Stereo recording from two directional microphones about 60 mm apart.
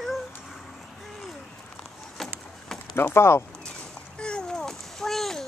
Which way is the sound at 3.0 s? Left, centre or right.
Left.